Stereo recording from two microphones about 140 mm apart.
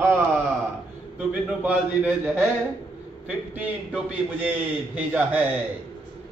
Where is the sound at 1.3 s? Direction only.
10° right (ahead or behind).